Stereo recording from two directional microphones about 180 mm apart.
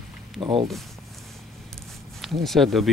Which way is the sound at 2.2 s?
Centre (ahead or behind).